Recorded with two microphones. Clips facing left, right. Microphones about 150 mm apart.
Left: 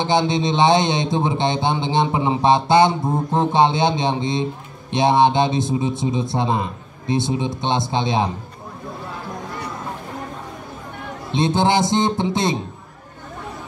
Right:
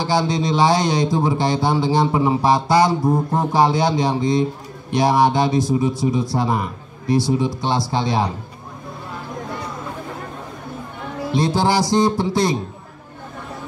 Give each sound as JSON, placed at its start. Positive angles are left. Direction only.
{"t": 0.0, "sound": "speech", "side_deg": 20}
{"t": 11.3, "sound": "speech", "side_deg": 20}